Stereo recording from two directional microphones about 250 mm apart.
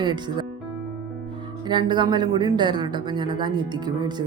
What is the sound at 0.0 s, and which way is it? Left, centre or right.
Speech, centre.